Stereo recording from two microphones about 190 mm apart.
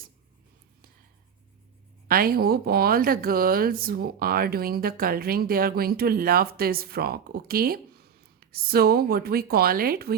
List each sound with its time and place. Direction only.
2.0 s speech: 50° right (ahead or behind)